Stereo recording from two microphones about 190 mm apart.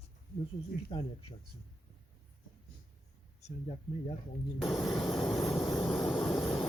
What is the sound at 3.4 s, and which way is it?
Speech, 35° left (ahead or behind).